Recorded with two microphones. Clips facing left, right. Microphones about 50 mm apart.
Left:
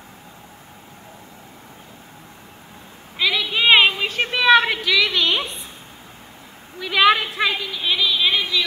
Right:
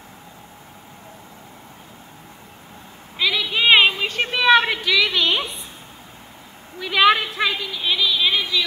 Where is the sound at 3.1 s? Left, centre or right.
Centre.